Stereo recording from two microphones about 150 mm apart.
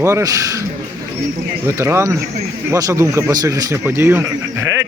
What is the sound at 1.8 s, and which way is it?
Speech, 20° right (ahead or behind).